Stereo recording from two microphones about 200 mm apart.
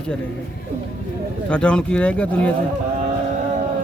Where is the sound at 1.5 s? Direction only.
5° left (ahead or behind).